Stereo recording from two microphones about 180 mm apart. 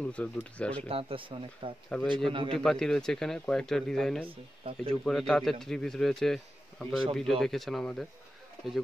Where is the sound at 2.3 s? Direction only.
30° right (ahead or behind).